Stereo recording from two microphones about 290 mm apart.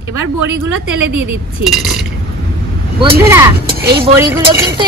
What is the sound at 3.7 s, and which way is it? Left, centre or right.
Speech, right.